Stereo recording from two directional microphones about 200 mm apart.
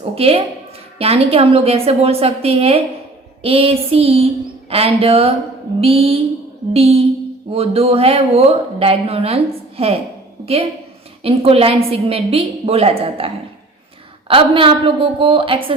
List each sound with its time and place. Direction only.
0.0 s a woman's voice: 30° right (ahead or behind)
11.2 s a woman's voice: 30° right (ahead or behind)